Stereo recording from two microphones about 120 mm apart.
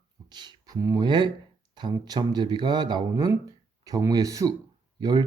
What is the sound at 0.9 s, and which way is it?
Speech, 40° right (ahead or behind).